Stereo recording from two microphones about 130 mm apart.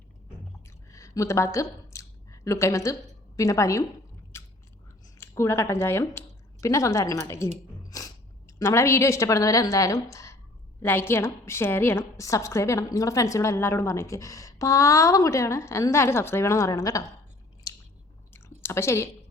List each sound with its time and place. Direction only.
0.9 s a sound: 25° left (ahead or behind)
3.3 s a woman's voice: 25° left (ahead or behind)
4.3 s biting: 20° left (ahead or behind)
5.1 s a woman's voice: 20° left (ahead or behind)
18.3 s chewing: 20° left (ahead or behind)